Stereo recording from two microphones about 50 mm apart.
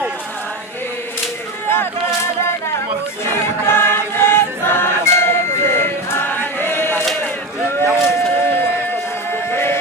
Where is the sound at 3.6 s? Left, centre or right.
Left.